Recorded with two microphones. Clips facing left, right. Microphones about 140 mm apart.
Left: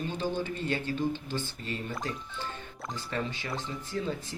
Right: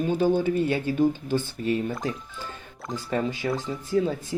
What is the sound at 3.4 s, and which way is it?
Speech, 40° right (ahead or behind).